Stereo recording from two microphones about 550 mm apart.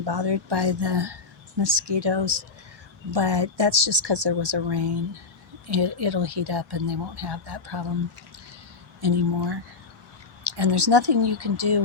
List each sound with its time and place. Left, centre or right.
0.0 s speech: right
9.0 s speech: right
10.6 s speech: right